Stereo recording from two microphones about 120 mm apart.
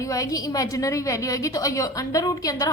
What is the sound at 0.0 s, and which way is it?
A woman's voice, 30° left (ahead or behind).